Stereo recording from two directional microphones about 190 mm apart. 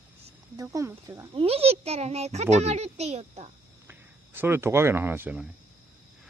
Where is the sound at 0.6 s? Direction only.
15° right (ahead or behind).